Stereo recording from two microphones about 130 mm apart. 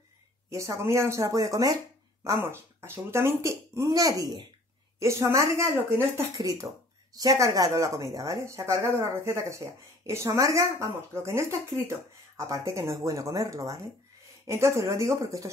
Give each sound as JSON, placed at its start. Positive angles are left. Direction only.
{"t": 0.5, "sound": "speech", "side_deg": -25}